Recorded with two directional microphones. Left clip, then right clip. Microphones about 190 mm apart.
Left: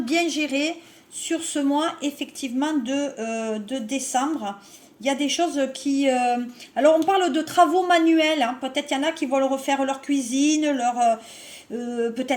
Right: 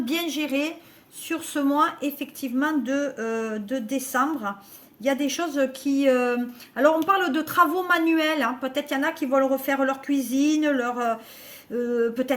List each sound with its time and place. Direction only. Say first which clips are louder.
0.1 s a woman's voice: left 5 dB; 45° right (ahead or behind)